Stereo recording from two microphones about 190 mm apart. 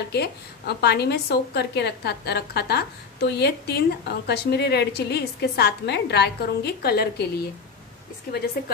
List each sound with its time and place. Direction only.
0.1 s a woman's voice: 60° left (ahead or behind)
8.6 s a woman's voice: 55° left (ahead or behind)